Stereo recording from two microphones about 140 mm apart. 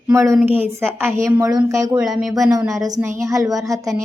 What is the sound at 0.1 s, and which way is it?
A woman's voice, 20° right (ahead or behind).